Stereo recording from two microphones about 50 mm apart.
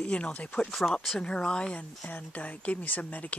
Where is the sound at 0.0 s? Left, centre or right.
Left.